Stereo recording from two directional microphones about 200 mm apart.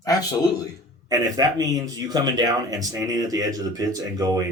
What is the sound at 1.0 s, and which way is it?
Speech, 20° right (ahead or behind).